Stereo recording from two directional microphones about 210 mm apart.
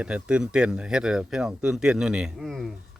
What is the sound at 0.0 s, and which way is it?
Speech, 5° right (ahead or behind).